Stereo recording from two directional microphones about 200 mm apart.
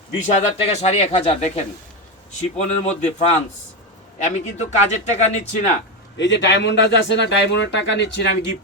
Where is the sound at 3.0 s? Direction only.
35° left (ahead or behind).